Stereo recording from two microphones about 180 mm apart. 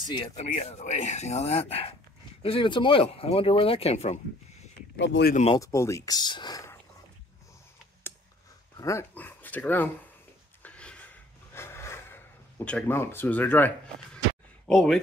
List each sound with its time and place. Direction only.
0.0 s speech: 25° left (ahead or behind)
0.4 s speech: 40° left (ahead or behind)
4.9 s speech: 80° left
5.3 s speech: 35° left (ahead or behind)
5.6 s speech: 15° left (ahead or behind)
8.7 s speech: 15° left (ahead or behind)
10.6 s a sound: 5° left (ahead or behind)
14.7 s speech: centre (ahead or behind)